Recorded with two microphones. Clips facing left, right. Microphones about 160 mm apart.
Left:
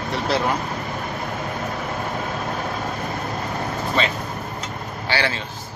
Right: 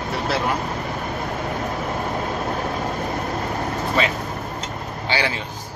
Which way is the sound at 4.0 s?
5° right (ahead or behind).